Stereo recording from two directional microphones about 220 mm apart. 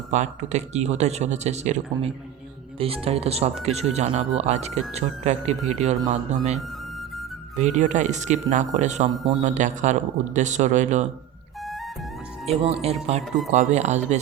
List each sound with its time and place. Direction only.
0.1 s speech: 30° right (ahead or behind)
7.6 s speech: 35° right (ahead or behind)
12.5 s speech: 30° right (ahead or behind)